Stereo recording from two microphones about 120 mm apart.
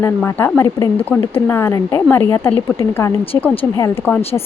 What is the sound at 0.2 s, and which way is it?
Speech, 15° left (ahead or behind).